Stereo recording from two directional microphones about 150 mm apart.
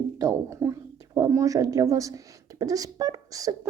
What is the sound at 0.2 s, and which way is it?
Speech, 20° right (ahead or behind).